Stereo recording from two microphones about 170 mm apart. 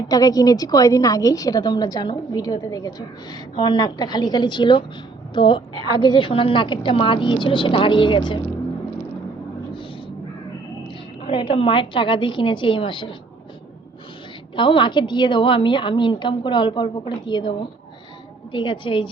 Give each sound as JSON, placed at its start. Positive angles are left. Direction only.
{"t": 0.1, "sound": "a woman's voice", "side_deg": 20}
{"t": 11.3, "sound": "a woman's voice", "side_deg": 30}
{"t": 14.5, "sound": "a woman's voice", "side_deg": 30}
{"t": 18.5, "sound": "a woman's voice", "side_deg": 30}